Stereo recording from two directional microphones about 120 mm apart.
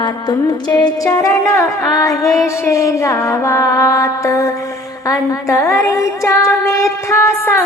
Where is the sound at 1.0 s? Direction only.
30° left (ahead or behind).